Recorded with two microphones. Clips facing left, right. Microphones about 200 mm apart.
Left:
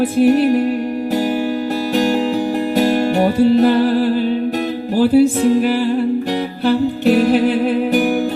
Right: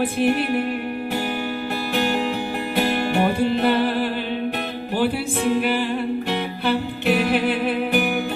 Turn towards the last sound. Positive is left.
turn(degrees=40)  # may be behind; listen again after turning